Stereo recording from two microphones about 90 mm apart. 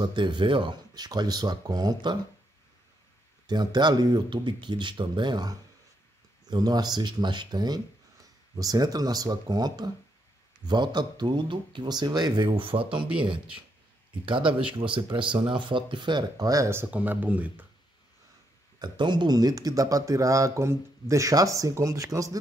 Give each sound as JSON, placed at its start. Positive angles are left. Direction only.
{"t": 0.0, "sound": "speech", "side_deg": -60}
{"t": 3.4, "sound": "speech", "side_deg": -50}
{"t": 12.4, "sound": "speech", "side_deg": -80}
{"t": 14.2, "sound": "speech", "side_deg": -70}
{"t": 16.6, "sound": "speech", "side_deg": -25}
{"t": 18.8, "sound": "speech", "side_deg": -55}